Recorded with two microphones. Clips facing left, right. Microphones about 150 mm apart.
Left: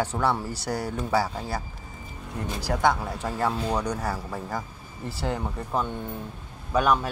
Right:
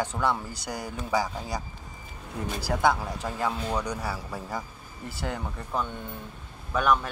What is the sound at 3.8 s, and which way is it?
Speech, 5° right (ahead or behind).